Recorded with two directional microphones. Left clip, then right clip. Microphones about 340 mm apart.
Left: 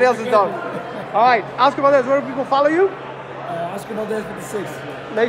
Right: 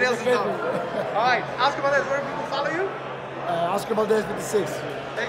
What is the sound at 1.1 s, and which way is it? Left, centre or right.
Speech, centre.